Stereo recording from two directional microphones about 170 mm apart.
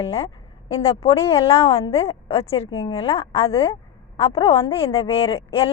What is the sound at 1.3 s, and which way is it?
A woman's voice, 35° left (ahead or behind).